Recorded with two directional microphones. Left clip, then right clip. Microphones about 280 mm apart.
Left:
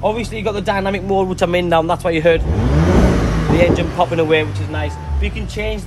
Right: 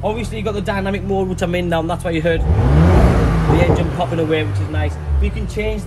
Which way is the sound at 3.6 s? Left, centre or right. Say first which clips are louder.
Left 6 dB; left.